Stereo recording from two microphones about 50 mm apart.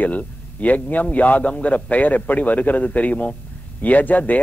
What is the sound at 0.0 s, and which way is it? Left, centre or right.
Speech, left.